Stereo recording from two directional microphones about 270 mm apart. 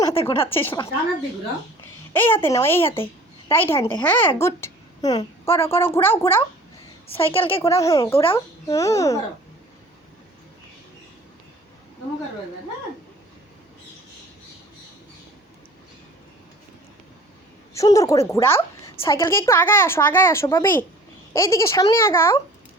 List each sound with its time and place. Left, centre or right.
0.0 s a sound: centre
0.3 s a woman's voice: centre
2.1 s a woman's voice: centre
7.1 s a woman's voice: centre
17.7 s a woman's voice: centre